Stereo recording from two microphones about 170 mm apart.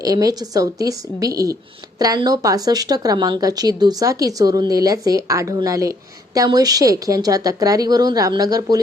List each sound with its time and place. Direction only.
0.0 s a woman's voice: 20° right (ahead or behind)